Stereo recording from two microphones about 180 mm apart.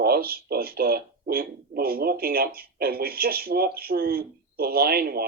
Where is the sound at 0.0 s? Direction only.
55° right (ahead or behind).